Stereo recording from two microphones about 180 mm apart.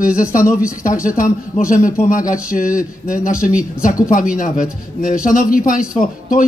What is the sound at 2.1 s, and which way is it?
Speech, 45° left (ahead or behind).